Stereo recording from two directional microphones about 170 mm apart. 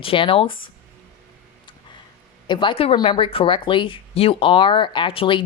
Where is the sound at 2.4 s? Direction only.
30° left (ahead or behind).